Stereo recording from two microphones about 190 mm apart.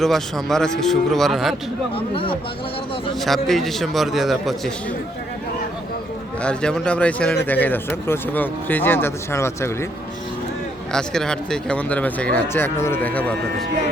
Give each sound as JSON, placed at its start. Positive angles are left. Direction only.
{"t": 0.0, "sound": "speech", "side_deg": 0}
{"t": 2.1, "sound": "speech", "side_deg": 25}
{"t": 3.2, "sound": "speech", "side_deg": 0}
{"t": 6.4, "sound": "speech", "side_deg": 5}
{"t": 10.9, "sound": "speech", "side_deg": 5}